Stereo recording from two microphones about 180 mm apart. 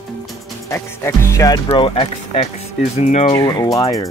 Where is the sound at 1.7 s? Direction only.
30° left (ahead or behind).